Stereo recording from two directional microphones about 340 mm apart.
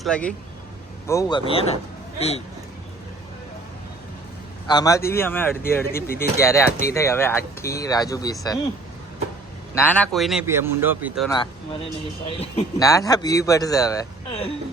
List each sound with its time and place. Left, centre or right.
0.0 s a man's voice: centre
4.6 s a man's voice: centre
9.7 s a man's voice: centre
12.3 s a man's voice: centre